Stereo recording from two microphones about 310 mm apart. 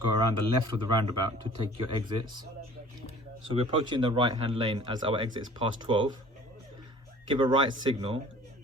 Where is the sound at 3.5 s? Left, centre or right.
Centre.